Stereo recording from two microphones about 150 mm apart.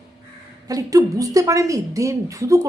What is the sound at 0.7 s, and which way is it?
A woman's voice, 25° right (ahead or behind).